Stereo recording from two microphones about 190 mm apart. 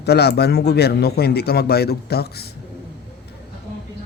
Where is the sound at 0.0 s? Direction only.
60° left (ahead or behind).